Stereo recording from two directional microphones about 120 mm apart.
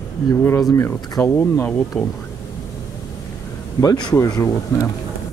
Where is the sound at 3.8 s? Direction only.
30° left (ahead or behind).